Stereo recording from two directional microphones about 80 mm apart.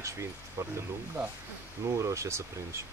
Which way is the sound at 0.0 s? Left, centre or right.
Right.